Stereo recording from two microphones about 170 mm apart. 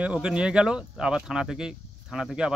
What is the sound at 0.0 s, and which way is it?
Speech, 5° right (ahead or behind).